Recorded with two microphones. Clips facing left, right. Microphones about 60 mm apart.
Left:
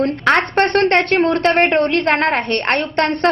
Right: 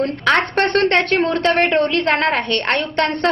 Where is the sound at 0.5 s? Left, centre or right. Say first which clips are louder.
Left 2 dB; left.